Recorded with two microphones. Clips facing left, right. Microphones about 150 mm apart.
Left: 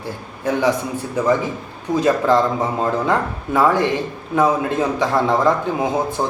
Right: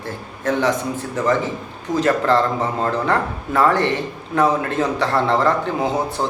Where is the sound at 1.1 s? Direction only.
15° left (ahead or behind).